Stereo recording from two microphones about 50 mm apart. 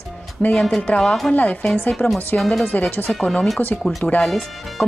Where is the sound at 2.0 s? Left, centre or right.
Centre.